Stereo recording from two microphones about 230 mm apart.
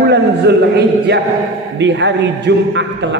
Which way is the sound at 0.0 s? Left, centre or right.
Right.